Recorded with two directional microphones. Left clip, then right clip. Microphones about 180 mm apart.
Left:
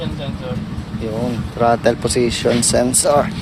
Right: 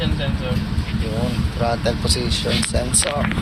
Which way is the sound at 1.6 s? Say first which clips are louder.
Left 7 dB; 65° left (ahead or behind).